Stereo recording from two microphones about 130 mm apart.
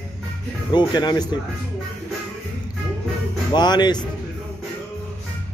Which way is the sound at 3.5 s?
35° left (ahead or behind).